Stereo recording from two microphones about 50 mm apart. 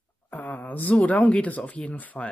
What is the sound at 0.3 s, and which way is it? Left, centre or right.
Speech, left.